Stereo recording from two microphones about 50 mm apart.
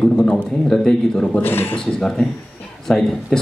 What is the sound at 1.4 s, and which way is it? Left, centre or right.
Speech, left.